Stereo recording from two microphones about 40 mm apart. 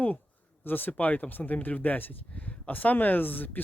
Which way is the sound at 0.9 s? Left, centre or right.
Left.